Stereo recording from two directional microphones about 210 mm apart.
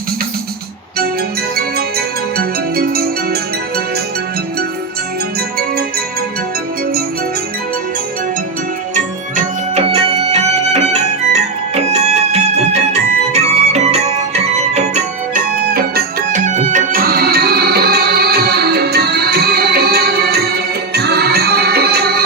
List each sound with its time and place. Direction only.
1.5 s music: 45° right (ahead or behind)
9.3 s music: 30° right (ahead or behind); by 22.2 s 50° right (ahead or behind)